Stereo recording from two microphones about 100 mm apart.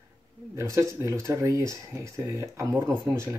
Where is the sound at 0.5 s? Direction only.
30° right (ahead or behind).